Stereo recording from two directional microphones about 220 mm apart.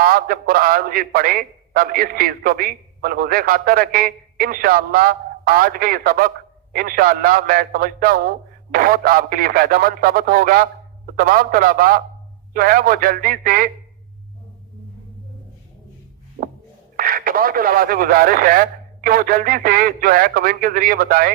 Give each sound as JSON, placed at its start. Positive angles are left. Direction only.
{"t": 0.0, "sound": "a man's voice", "side_deg": -40}
{"t": 16.4, "sound": "a sound", "side_deg": -35}
{"t": 17.0, "sound": "a man's voice", "side_deg": -40}